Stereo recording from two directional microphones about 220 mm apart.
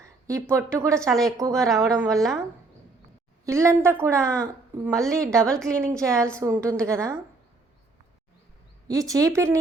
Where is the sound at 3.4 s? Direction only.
15° right (ahead or behind).